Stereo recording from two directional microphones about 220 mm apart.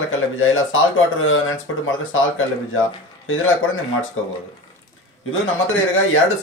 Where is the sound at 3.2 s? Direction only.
65° left (ahead or behind).